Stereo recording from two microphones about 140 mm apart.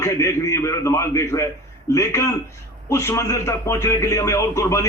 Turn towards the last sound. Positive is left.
turn(degrees=20)  # may be behind; listen again after turning